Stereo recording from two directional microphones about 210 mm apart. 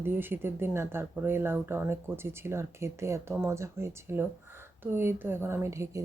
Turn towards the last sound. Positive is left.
turn(degrees=-15)  # may be behind; listen again after turning